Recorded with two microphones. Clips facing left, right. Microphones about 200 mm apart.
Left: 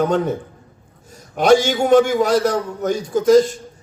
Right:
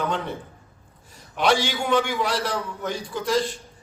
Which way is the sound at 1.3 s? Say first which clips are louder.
Left 8 dB; 45° left (ahead or behind).